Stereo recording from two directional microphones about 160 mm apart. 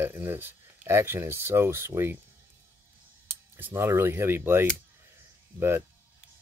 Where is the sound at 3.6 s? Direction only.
15° right (ahead or behind).